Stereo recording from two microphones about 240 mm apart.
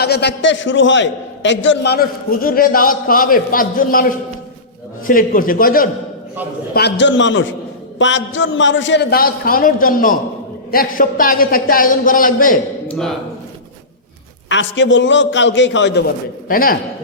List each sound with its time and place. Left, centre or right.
0.0 s a man's voice: left
12.9 s speech: centre
14.5 s a man's voice: left
16.5 s a man's voice: left